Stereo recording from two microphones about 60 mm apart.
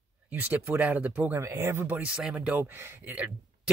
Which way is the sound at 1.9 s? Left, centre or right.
Centre.